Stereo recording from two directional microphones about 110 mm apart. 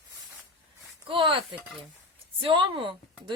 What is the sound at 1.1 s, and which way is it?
Speech, 50° right (ahead or behind).